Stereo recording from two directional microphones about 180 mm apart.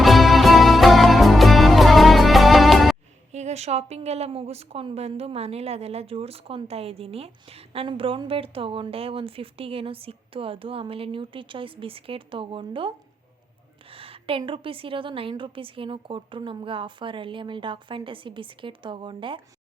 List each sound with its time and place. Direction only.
0.0 s music: centre (ahead or behind)
3.3 s a woman's voice: 40° right (ahead or behind)
13.9 s a woman's voice: 30° right (ahead or behind)